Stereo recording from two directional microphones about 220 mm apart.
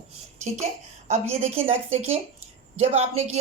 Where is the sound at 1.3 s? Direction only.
30° right (ahead or behind).